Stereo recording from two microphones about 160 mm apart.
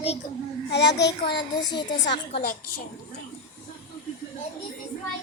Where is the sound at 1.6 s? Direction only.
25° left (ahead or behind).